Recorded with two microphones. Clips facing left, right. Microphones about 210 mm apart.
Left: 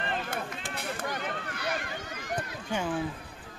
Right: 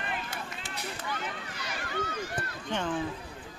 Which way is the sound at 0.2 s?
55° left (ahead or behind).